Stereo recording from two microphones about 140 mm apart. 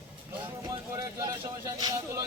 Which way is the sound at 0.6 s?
25° right (ahead or behind).